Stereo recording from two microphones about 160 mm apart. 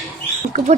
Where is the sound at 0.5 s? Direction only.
55° right (ahead or behind).